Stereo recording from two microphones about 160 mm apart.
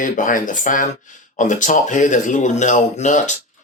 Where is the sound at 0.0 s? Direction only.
55° left (ahead or behind).